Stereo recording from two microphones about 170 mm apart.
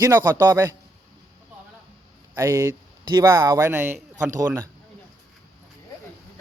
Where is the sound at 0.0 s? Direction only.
15° right (ahead or behind).